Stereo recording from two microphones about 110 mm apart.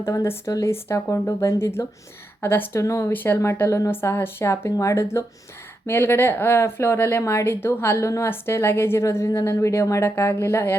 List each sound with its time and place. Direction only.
0.0 s speech: 25° left (ahead or behind)